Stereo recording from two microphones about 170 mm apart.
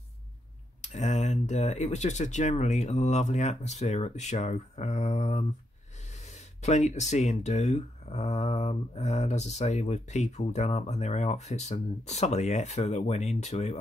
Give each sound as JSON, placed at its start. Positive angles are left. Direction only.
{"t": 0.8, "sound": "speech", "side_deg": 45}